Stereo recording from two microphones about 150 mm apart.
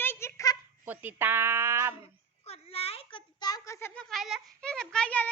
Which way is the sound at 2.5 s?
40° left (ahead or behind).